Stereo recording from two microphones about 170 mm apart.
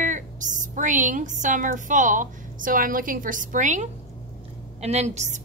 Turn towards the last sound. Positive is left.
turn(degrees=-45)  # may be behind; listen again after turning